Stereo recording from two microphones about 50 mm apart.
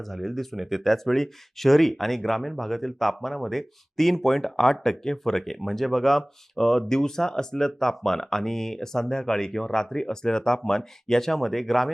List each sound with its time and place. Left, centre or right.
0.0 s speech: centre